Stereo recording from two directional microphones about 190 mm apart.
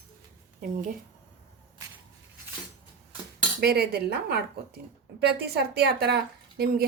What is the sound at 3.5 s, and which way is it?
A woman's voice, 55° right (ahead or behind).